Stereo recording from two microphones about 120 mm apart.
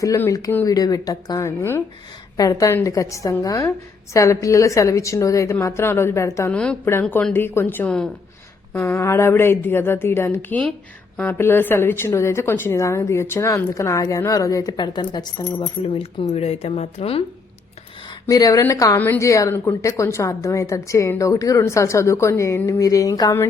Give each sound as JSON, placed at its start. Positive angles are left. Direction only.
{"t": 0.7, "sound": "a woman's voice", "side_deg": 30}
{"t": 6.5, "sound": "a woman's voice", "side_deg": 10}
{"t": 8.7, "sound": "a woman's voice", "side_deg": 20}
{"t": 16.3, "sound": "speech", "side_deg": 60}
{"t": 18.3, "sound": "a woman's voice", "side_deg": 30}